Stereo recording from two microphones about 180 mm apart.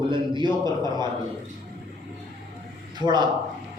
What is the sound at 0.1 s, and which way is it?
Speech, 25° right (ahead or behind).